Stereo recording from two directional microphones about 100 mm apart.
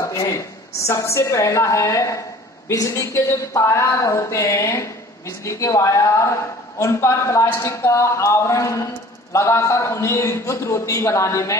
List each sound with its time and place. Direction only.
0.1 s a woman's voice: 35° left (ahead or behind)